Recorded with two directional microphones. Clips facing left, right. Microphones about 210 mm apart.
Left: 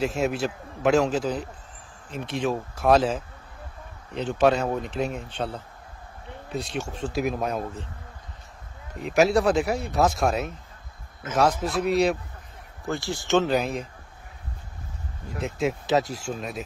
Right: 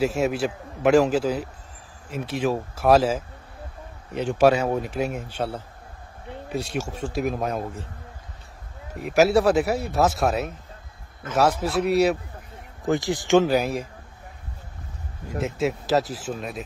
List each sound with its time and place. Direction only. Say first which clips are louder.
0.0 s a man's voice: right 2 dB; 5° right (ahead or behind)
9.0 s a man's voice: right 2 dB; 5° right (ahead or behind)
12.8 s a man's voice: right 6 dB; 20° right (ahead or behind)
15.4 s speech: right 1 dB; centre (ahead or behind)